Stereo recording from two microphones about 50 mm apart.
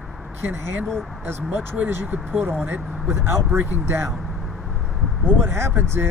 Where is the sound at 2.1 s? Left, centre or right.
Right.